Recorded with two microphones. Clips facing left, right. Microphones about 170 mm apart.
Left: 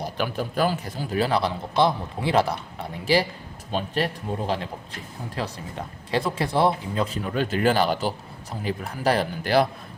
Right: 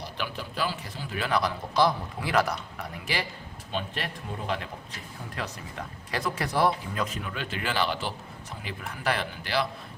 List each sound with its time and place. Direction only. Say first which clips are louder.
0.0 s a man's voice: left 8 dB; 45° left (ahead or behind)